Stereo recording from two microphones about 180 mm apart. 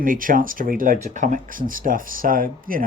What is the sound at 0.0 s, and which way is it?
Speech, 50° right (ahead or behind).